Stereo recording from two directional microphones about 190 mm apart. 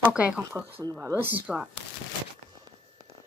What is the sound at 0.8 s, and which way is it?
Speech, 20° right (ahead or behind).